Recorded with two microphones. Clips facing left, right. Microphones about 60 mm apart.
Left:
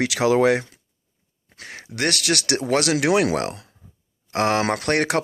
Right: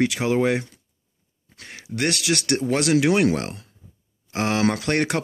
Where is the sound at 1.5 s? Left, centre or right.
Left.